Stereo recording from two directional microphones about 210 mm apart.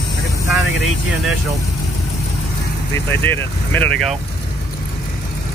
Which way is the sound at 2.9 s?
10° left (ahead or behind).